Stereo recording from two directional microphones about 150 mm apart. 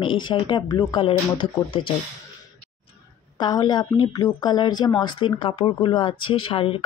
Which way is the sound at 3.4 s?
25° left (ahead or behind).